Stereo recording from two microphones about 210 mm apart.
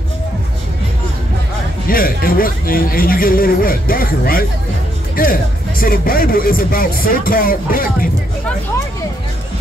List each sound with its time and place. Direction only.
1.9 s speech: 45° left (ahead or behind)